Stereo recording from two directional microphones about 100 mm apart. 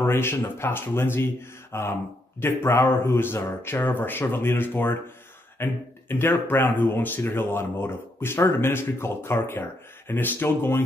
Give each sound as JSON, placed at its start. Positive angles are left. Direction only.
{"t": 0.0, "sound": "speech", "side_deg": 25}